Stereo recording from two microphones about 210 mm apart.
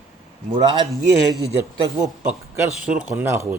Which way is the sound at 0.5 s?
20° right (ahead or behind).